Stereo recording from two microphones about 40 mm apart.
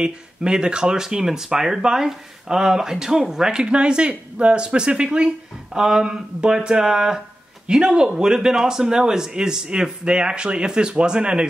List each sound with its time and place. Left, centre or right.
0.0 s speech: centre